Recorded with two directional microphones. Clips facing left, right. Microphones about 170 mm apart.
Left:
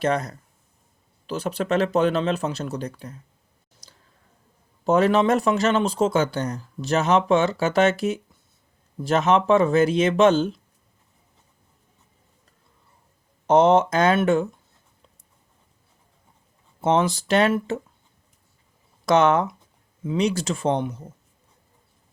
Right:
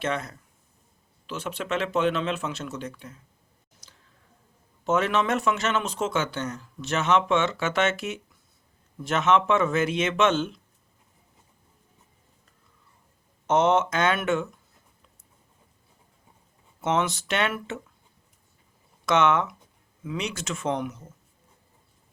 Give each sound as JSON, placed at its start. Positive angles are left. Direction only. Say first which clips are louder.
{"t": 0.0, "sound": "speech", "louder": "left 6 dB", "side_deg": 40}
{"t": 3.8, "sound": "a sound", "louder": "left 3 dB", "side_deg": 35}
{"t": 4.9, "sound": "speech", "louder": "left 6 dB", "side_deg": 35}
{"t": 13.5, "sound": "speech", "louder": "left 5 dB", "side_deg": 35}
{"t": 16.8, "sound": "speech", "louder": "left 5 dB", "side_deg": 30}
{"t": 19.0, "sound": "speech", "louder": "left 4 dB", "side_deg": 35}